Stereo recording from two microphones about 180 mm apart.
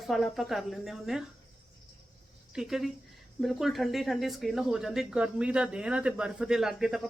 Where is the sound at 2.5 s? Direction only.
Centre (ahead or behind).